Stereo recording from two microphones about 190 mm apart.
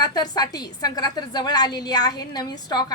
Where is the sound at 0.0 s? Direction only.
20° left (ahead or behind).